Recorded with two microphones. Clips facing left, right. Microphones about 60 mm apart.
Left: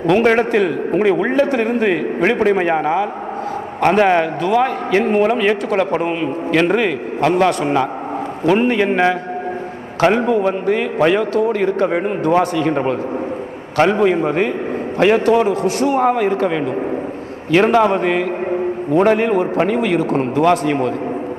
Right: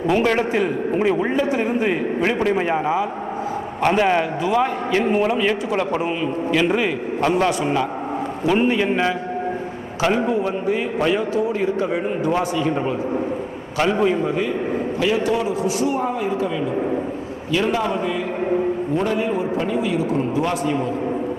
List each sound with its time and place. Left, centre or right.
0.3 s a man's voice: left